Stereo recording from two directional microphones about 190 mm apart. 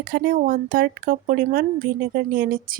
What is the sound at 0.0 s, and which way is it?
A woman's voice, 50° right (ahead or behind).